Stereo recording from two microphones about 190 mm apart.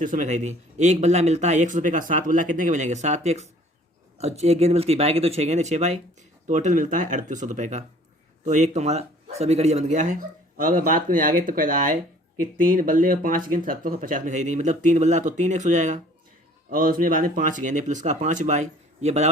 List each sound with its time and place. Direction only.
0.0 s speech: 45° right (ahead or behind)